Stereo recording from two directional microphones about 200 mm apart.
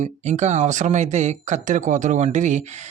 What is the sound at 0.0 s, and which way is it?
Speech, 35° right (ahead or behind).